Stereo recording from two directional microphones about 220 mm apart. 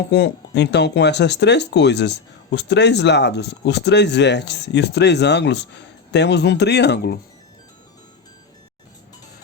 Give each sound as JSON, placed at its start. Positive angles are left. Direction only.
{"t": 0.1, "sound": "speech", "side_deg": 50}